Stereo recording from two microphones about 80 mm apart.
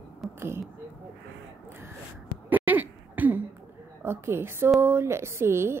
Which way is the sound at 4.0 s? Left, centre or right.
Right.